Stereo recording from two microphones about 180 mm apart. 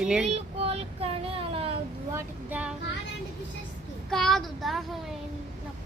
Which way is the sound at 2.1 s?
10° right (ahead or behind).